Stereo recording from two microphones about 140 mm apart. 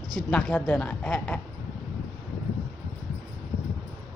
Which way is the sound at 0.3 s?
10° left (ahead or behind).